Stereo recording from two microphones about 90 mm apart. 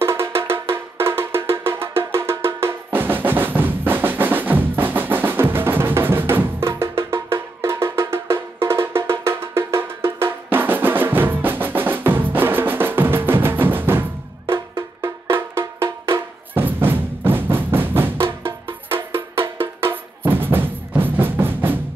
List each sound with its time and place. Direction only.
0.0 s music: 25° right (ahead or behind)